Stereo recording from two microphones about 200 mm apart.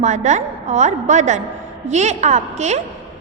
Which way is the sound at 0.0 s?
35° right (ahead or behind).